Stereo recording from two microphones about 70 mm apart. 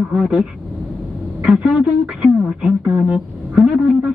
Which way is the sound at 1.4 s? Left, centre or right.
Centre.